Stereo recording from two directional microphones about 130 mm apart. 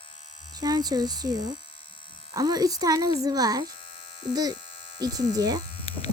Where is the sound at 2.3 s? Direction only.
30° right (ahead or behind).